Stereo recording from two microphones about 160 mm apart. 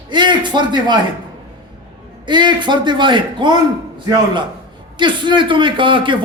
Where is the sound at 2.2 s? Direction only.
30° right (ahead or behind).